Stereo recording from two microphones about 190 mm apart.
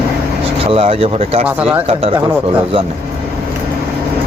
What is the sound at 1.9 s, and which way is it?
Speech, 30° right (ahead or behind).